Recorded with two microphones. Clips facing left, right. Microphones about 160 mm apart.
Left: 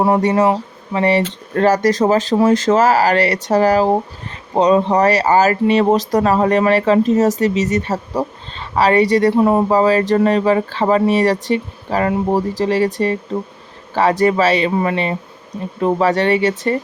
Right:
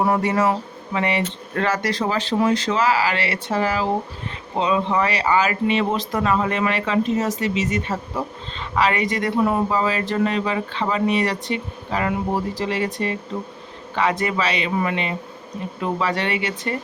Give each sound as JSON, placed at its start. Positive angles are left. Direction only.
{"t": 0.0, "sound": "speech", "side_deg": 30}